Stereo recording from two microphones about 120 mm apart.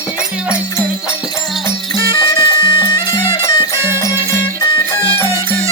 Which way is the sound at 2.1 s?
30° left (ahead or behind).